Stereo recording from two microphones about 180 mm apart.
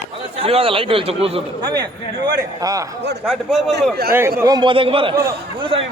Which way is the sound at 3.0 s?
70° right (ahead or behind).